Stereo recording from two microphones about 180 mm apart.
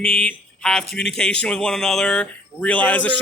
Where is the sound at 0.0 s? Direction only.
5° left (ahead or behind).